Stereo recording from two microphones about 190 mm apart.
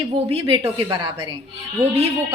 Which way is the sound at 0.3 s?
25° right (ahead or behind).